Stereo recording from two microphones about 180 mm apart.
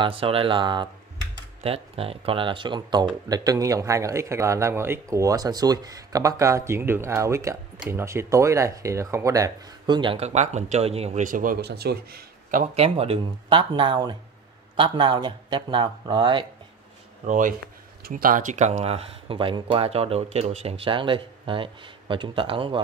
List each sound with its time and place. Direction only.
0.0 s a man's voice: 30° right (ahead or behind); by 12.6 s 55° right (ahead or behind)
12.7 s a man's voice: 35° right (ahead or behind)
17.3 s a man's voice: 45° right (ahead or behind); by 22.8 s 30° right (ahead or behind)